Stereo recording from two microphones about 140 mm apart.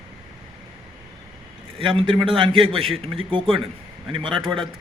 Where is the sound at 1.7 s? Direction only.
40° right (ahead or behind).